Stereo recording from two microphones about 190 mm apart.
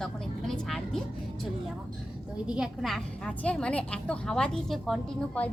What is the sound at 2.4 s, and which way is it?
A woman's voice, 5° right (ahead or behind).